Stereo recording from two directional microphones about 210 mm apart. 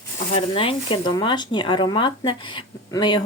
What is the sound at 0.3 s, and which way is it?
A woman's voice, 25° left (ahead or behind).